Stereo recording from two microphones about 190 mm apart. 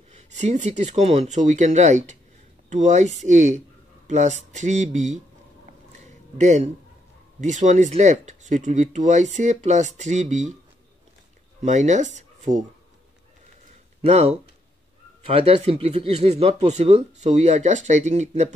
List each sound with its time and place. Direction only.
0.1 s speech: 35° right (ahead or behind)
5.9 s a sound: 40° right (ahead or behind)
7.3 s speech: 40° right (ahead or behind)
11.6 s speech: 40° right (ahead or behind)
14.0 s speech: 35° right (ahead or behind)